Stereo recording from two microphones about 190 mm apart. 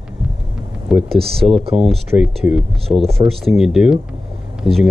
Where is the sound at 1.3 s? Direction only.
30° right (ahead or behind).